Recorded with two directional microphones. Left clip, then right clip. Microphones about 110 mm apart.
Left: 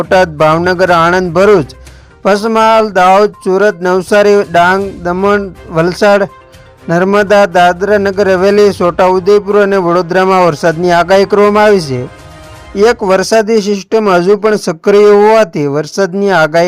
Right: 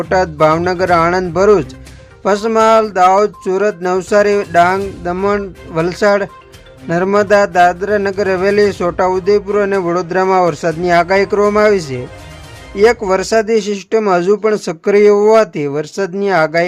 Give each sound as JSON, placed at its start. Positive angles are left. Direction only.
{"t": 0.0, "sound": "speech", "side_deg": 35}